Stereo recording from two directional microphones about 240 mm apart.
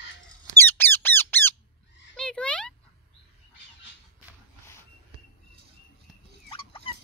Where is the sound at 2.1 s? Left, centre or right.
Centre.